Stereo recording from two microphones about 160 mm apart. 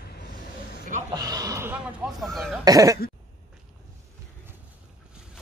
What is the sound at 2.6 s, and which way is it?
Cough, 20° right (ahead or behind).